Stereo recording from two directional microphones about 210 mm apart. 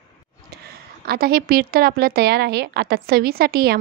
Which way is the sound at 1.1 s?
45° right (ahead or behind).